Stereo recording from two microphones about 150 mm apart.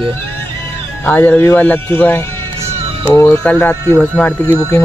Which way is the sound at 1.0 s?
10° left (ahead or behind).